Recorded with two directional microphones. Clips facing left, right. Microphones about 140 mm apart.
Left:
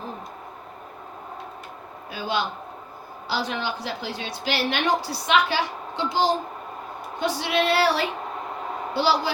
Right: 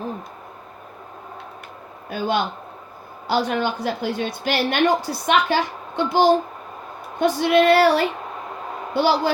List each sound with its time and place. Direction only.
2.0 s a woman's voice: 50° right (ahead or behind)